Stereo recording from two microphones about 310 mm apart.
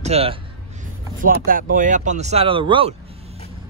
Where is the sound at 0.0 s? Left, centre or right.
Centre.